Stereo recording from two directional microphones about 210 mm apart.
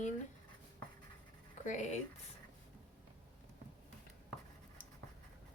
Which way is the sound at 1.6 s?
35° left (ahead or behind).